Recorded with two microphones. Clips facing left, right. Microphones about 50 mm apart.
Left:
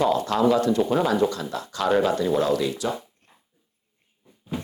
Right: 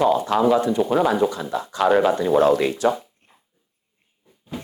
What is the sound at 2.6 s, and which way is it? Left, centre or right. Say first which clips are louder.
Speech: right 6 dB; right.